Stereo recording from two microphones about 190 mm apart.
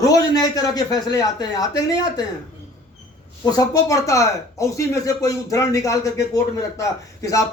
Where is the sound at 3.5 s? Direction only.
20° left (ahead or behind).